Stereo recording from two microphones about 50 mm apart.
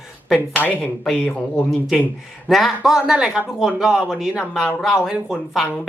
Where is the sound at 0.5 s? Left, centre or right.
Left.